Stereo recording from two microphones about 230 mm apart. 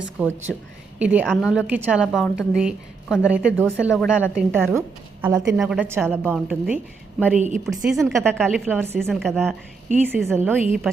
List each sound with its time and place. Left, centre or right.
0.2 s a woman's voice: centre
7.3 s a woman's voice: right
7.9 s a woman's voice: centre